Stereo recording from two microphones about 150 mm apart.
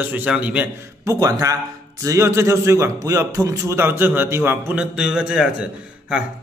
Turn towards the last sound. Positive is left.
turn(degrees=-5)  # may be behind; listen again after turning